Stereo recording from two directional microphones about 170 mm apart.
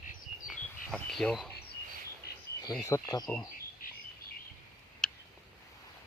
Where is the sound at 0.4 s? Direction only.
Centre (ahead or behind).